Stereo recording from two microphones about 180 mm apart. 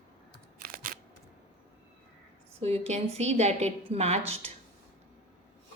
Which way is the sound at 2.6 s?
35° right (ahead or behind).